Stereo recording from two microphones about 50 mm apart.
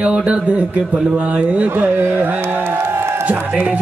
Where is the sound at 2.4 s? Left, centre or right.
Right.